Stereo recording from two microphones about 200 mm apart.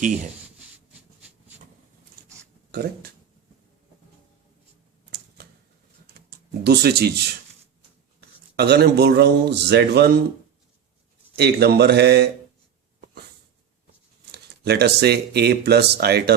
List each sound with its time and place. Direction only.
2.7 s speech: 50° right (ahead or behind)
6.7 s speech: 55° right (ahead or behind)
8.5 s speech: 55° right (ahead or behind)
11.3 s speech: 55° right (ahead or behind)
14.3 s speech: 55° right (ahead or behind)